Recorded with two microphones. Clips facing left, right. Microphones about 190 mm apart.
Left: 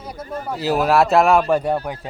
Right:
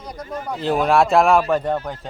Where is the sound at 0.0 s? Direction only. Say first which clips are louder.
Left 1 dB; 5° left (ahead or behind).